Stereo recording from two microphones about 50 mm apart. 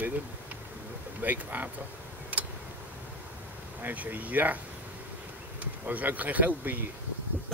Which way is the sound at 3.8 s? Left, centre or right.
Right.